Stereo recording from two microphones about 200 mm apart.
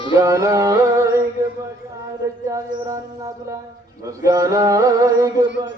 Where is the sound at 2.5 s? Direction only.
15° right (ahead or behind).